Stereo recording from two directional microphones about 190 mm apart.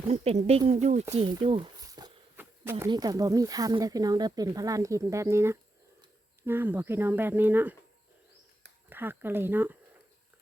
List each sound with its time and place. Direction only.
0.1 s speech: 35° right (ahead or behind)
1.1 s a sound: 30° right (ahead or behind); by 2.8 s 10° right (ahead or behind)
2.9 s speech: 20° right (ahead or behind)
8.9 s speech: 10° right (ahead or behind)